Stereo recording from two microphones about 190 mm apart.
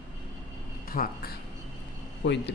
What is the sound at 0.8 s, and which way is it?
Speech, 50° left (ahead or behind).